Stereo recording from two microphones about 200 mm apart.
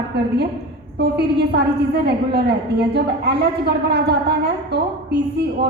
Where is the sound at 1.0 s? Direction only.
55° right (ahead or behind).